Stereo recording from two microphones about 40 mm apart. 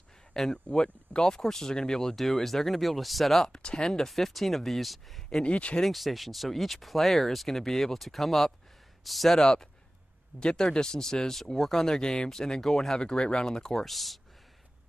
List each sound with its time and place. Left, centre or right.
0.5 s speech: left; by 3.4 s centre
3.6 s speech: centre
4.1 s speech: centre
5.4 s speech: left
5.8 s speech: centre
9.4 s speech: centre
13.8 s speech: centre